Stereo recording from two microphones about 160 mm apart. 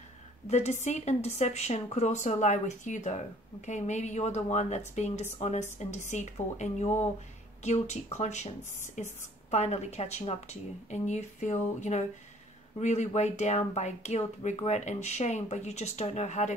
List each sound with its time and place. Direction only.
0.5 s speech: 45° left (ahead or behind)